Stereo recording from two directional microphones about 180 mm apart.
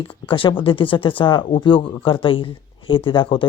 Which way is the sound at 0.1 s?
30° left (ahead or behind).